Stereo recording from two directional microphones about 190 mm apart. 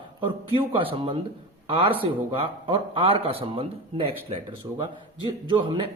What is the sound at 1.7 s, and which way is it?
A man's voice, 30° right (ahead or behind).